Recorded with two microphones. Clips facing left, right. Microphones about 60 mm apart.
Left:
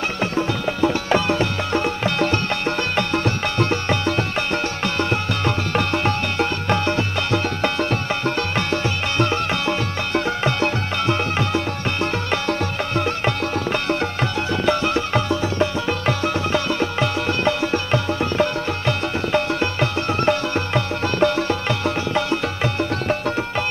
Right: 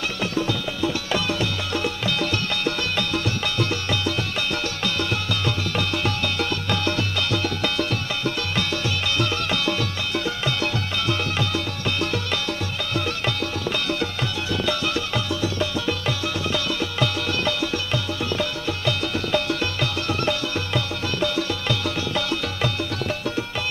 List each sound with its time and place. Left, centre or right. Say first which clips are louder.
0.2 s music: left 3 dB; left